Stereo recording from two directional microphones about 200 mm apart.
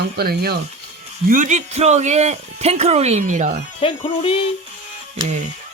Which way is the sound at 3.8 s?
25° left (ahead or behind).